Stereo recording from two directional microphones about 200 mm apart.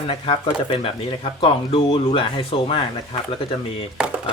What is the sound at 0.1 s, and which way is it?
Speech, 25° left (ahead or behind).